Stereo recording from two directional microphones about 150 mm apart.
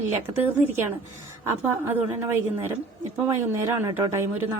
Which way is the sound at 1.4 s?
15° right (ahead or behind).